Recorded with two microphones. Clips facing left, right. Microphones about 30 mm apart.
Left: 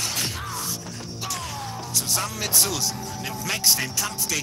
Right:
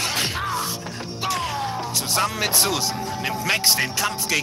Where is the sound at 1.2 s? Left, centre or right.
Right.